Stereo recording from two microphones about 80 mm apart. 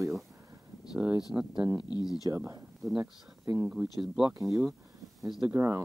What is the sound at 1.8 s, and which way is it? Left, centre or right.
Speech, left.